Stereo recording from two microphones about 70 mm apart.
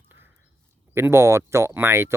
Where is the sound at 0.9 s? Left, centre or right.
Right.